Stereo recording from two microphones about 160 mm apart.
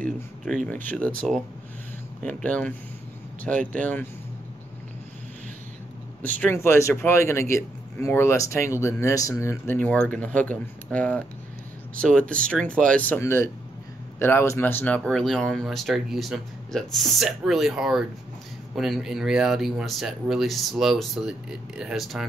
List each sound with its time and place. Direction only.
0.7 s a man's voice: 10° left (ahead or behind)
6.2 s a man's voice: 10° left (ahead or behind)